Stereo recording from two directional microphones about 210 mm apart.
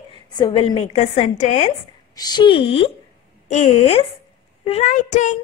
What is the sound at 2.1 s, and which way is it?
A woman's voice, 20° left (ahead or behind).